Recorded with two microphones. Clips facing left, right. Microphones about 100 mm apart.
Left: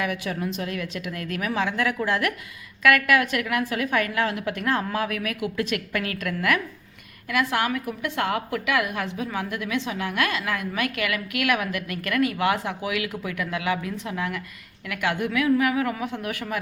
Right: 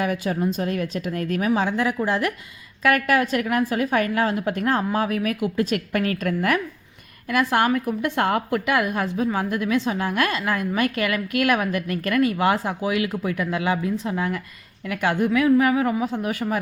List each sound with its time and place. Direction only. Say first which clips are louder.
0.0 s a woman's voice: right 4 dB; 35° right (ahead or behind)